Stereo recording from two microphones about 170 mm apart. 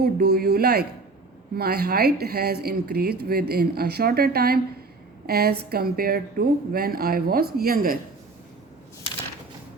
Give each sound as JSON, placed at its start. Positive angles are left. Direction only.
{"t": 0.0, "sound": "a woman's voice", "side_deg": -70}